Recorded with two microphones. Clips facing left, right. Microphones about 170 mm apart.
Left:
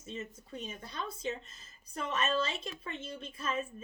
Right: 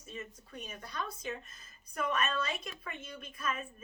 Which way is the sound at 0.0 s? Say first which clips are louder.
Left 3 dB; 25° left (ahead or behind).